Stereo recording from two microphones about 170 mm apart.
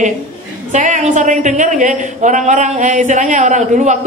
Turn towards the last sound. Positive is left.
turn(degrees=-45)  # may be behind; listen again after turning